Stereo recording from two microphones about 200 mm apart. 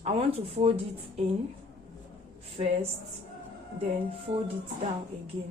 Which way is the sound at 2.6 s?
30° right (ahead or behind).